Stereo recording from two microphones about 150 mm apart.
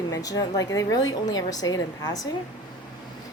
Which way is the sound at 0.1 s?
20° left (ahead or behind).